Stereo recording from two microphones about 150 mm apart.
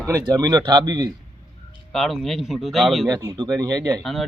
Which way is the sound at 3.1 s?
20° right (ahead or behind).